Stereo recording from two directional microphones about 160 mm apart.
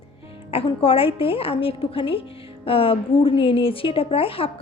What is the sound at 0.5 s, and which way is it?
A woman's voice, 35° left (ahead or behind).